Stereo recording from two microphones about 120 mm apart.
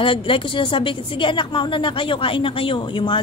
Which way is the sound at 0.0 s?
45° left (ahead or behind).